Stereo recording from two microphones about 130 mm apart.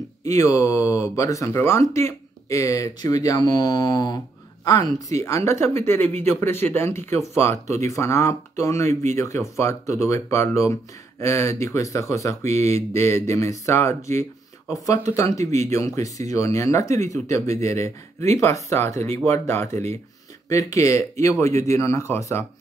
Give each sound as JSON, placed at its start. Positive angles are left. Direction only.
{"t": 0.2, "sound": "speech", "side_deg": 25}
{"t": 12.4, "sound": "speech", "side_deg": -55}
{"t": 12.9, "sound": "speech", "side_deg": 20}